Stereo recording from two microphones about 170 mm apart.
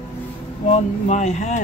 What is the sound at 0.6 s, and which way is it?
Speech, 45° left (ahead or behind).